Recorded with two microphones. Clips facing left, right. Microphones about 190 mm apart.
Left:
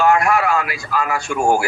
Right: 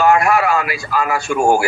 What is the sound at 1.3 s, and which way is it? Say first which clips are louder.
Speech: right 2 dB; 40° right (ahead or behind).